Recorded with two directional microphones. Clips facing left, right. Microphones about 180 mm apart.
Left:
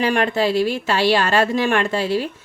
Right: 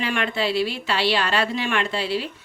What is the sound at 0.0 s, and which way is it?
Speech, 40° left (ahead or behind).